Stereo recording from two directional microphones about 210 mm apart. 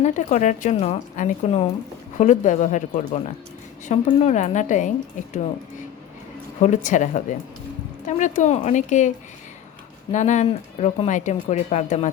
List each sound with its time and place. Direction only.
0.0 s speech: 35° left (ahead or behind)
6.6 s speech: 35° left (ahead or behind)